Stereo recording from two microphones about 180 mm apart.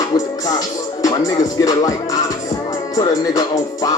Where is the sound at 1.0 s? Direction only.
20° left (ahead or behind).